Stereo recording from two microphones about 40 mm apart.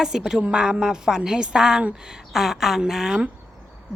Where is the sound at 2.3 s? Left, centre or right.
Centre.